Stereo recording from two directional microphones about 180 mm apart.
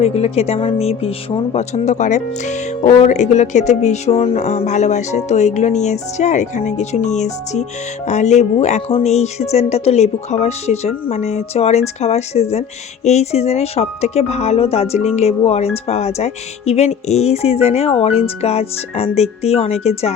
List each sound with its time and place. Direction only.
0.0 s speech: 35° left (ahead or behind)